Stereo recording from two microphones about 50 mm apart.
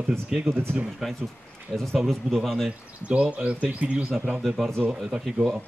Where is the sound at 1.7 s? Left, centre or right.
Centre.